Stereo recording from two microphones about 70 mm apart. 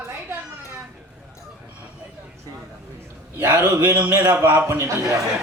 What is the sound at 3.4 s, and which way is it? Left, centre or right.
A man's voice, right.